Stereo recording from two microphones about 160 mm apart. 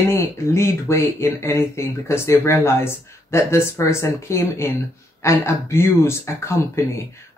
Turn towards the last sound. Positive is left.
turn(degrees=15)  # may be behind; listen again after turning